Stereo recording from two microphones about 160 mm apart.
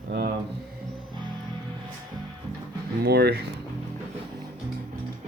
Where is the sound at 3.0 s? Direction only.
80° right.